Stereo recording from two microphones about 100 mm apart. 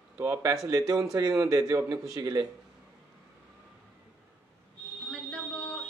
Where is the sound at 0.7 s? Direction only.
35° right (ahead or behind).